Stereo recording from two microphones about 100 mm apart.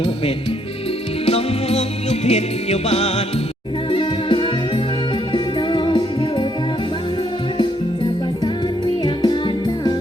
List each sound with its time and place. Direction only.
1.2 s music: 90° left
3.9 s music: 55° left (ahead or behind)
9.0 s music: 50° left (ahead or behind)